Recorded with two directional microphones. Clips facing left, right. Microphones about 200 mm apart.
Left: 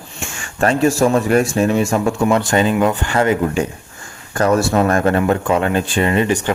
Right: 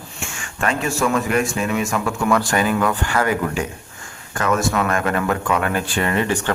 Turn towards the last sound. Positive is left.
turn(degrees=15)  # may be behind; listen again after turning